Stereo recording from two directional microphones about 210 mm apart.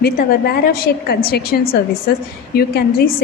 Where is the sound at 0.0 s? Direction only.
45° left (ahead or behind).